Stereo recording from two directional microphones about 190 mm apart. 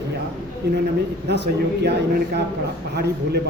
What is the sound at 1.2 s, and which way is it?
Speech, 60° right (ahead or behind).